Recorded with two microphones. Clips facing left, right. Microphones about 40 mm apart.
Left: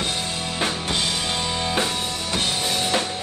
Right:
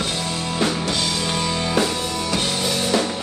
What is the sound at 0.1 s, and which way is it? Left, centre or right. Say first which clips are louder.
Music: right 2 dB; right.